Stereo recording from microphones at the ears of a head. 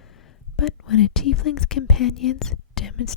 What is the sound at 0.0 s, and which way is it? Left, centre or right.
Speech, left.